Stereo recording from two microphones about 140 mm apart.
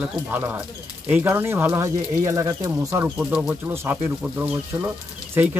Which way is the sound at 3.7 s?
15° right (ahead or behind).